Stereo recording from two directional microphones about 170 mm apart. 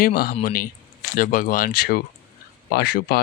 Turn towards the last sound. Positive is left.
turn(degrees=65)  # may be behind; listen again after turning